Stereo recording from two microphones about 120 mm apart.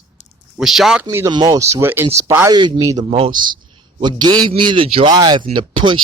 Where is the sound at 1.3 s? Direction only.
35° right (ahead or behind); by 2.0 s 20° right (ahead or behind).